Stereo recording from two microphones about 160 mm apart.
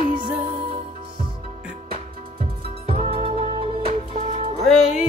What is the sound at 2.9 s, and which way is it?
Music, 35° right (ahead or behind).